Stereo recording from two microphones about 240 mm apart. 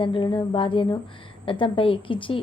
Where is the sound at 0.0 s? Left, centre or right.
Left.